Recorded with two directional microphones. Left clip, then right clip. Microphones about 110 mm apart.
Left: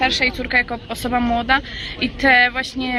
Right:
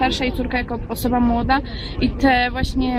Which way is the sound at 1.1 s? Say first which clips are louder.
Even; 20° left (ahead or behind).